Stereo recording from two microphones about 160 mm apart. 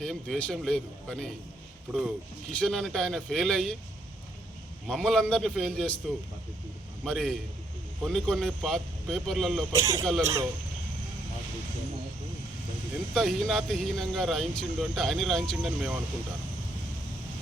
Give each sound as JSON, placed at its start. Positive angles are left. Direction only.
{"t": 0.0, "sound": "speech", "side_deg": 5}
{"t": 4.9, "sound": "speech", "side_deg": 5}
{"t": 7.0, "sound": "speech", "side_deg": 5}
{"t": 9.7, "sound": "speech", "side_deg": -15}
{"t": 13.1, "sound": "speech", "side_deg": 0}